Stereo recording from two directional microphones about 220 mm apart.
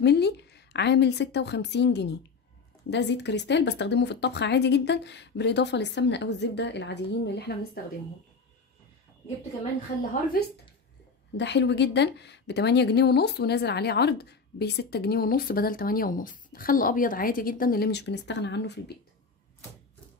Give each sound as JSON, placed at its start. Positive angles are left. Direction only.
{"t": 0.0, "sound": "speech", "side_deg": 50}
{"t": 10.4, "sound": "a woman's voice", "side_deg": 45}